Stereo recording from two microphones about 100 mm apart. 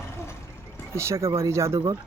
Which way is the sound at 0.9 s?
30° right (ahead or behind).